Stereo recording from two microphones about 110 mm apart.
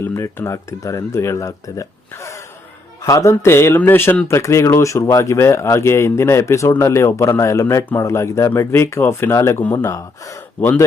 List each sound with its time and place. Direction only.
0.0 s speech: 25° left (ahead or behind)